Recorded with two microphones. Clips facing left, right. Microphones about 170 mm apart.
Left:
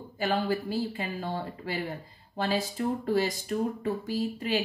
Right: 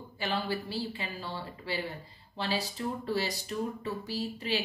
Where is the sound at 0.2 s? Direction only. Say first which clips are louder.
Left 5 dB; 45° left (ahead or behind).